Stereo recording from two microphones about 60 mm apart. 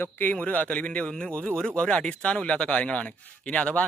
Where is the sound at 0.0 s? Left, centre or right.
Left.